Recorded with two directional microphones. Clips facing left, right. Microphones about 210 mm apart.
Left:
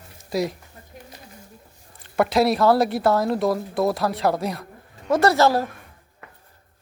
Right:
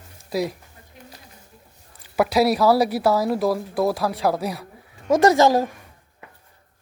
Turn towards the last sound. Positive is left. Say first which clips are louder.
# right 2 dB
turn(degrees=-15)  # may be behind; listen again after turning